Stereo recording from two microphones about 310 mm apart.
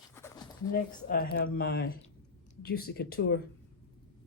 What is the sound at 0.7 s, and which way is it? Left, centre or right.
Speech, left.